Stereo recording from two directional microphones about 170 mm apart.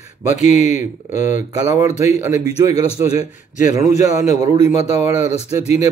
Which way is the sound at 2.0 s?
15° right (ahead or behind).